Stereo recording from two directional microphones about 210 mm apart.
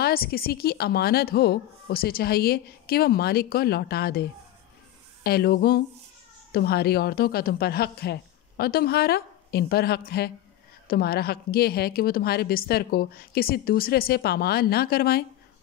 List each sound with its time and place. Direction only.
0.0 s a woman's voice: 45° left (ahead or behind)